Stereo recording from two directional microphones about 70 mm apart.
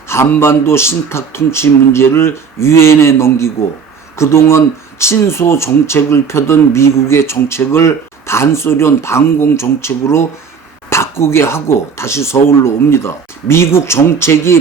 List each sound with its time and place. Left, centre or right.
0.1 s speech: left